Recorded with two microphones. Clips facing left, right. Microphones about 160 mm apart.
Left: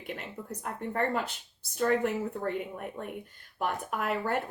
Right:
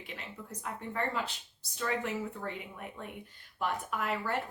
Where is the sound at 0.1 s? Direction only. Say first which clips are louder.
Left 8 dB; 50° left (ahead or behind).